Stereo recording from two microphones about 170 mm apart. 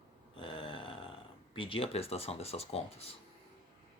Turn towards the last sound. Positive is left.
turn(degrees=35)  # may be behind; listen again after turning